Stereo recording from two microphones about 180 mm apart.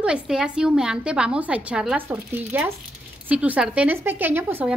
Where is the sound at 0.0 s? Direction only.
5° right (ahead or behind).